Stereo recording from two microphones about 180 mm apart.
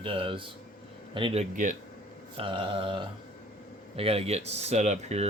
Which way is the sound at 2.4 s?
30° right (ahead or behind).